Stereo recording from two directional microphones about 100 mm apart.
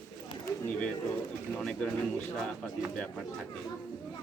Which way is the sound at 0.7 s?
10° left (ahead or behind).